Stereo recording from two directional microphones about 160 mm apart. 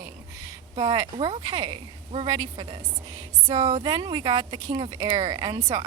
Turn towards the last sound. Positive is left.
turn(degrees=-20)  # may be behind; listen again after turning